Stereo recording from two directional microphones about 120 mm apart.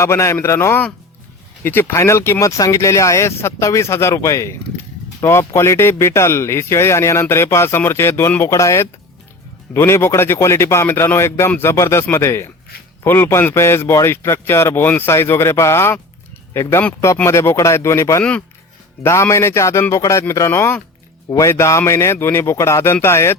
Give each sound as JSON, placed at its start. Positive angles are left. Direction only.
{"t": 0.0, "sound": "speech", "side_deg": 25}
{"t": 18.2, "sound": "speech", "side_deg": 10}
{"t": 19.0, "sound": "speech", "side_deg": 25}